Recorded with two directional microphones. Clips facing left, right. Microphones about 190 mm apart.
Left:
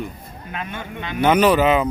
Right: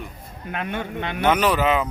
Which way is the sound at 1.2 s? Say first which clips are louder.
Left 4 dB; centre (ahead or behind).